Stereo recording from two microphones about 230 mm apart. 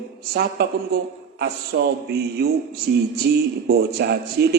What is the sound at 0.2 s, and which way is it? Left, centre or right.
A man's voice, right.